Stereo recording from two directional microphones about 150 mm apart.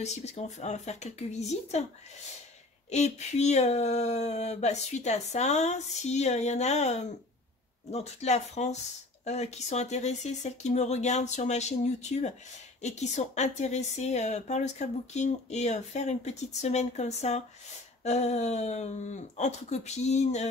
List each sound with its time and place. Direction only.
0.0 s speech: 50° left (ahead or behind)
2.9 s speech: 50° left (ahead or behind)